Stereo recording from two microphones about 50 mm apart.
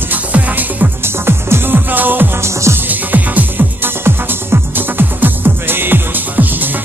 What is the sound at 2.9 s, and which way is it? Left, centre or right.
Music, right.